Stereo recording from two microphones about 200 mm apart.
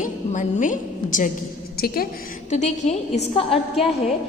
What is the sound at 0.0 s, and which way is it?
A woman's voice, 40° left (ahead or behind).